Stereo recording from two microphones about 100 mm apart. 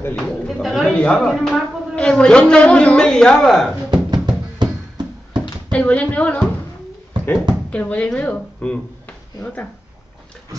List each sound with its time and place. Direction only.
0.1 s a sound: centre (ahead or behind)
0.9 s speech: 5° left (ahead or behind)
3.9 s music: 45° right (ahead or behind)
5.7 s speech: 15° left (ahead or behind)
7.7 s speech: 15° left (ahead or behind)